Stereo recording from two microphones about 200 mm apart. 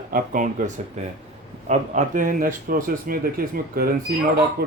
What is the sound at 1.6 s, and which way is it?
Speech, 35° right (ahead or behind).